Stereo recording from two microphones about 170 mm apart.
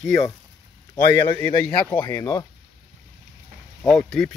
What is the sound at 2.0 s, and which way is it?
Speech, 20° left (ahead or behind).